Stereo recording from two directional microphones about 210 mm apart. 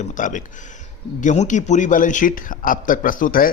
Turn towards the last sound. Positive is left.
turn(degrees=40)  # may be behind; listen again after turning